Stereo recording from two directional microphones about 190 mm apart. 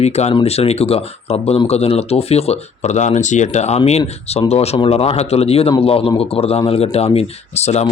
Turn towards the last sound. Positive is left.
turn(degrees=35)  # may be behind; listen again after turning